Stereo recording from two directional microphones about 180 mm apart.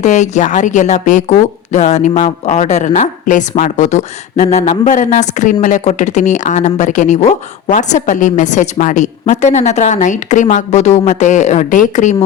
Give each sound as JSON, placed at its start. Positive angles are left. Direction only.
{"t": 0.0, "sound": "speech", "side_deg": 40}